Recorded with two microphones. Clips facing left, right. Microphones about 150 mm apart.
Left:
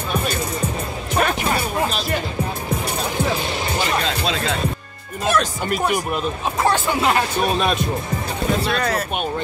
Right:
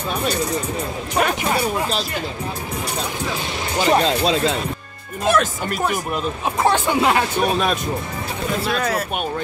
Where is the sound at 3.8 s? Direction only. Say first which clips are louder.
Right 5 dB; 35° right (ahead or behind).